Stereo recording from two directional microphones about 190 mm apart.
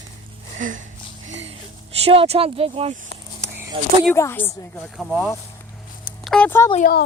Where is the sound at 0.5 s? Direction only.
40° right (ahead or behind).